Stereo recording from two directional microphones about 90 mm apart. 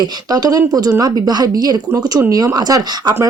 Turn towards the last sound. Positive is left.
turn(degrees=-45)  # may be behind; listen again after turning